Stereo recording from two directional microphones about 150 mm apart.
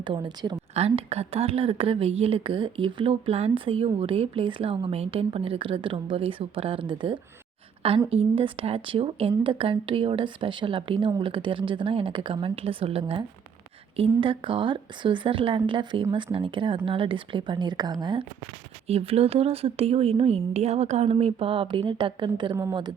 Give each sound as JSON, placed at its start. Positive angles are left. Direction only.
{"t": 0.0, "sound": "speech", "side_deg": -30}
{"t": 0.7, "sound": "speech", "side_deg": -45}
{"t": 18.9, "sound": "speech", "side_deg": -40}